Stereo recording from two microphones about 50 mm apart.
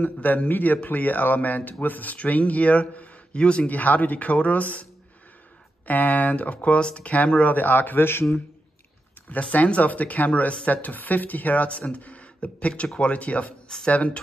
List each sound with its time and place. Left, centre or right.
0.0 s speech: left
5.9 s speech: left
9.3 s speech: left